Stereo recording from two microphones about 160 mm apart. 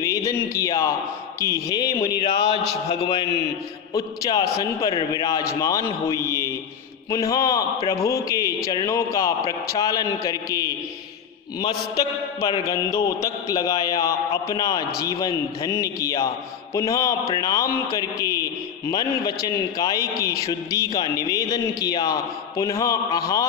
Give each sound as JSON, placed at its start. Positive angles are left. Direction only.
{"t": 0.0, "sound": "speech", "side_deg": 20}
{"t": 2.2, "sound": "a man's voice", "side_deg": 35}
{"t": 3.9, "sound": "speech", "side_deg": 20}
{"t": 12.4, "sound": "speech", "side_deg": 20}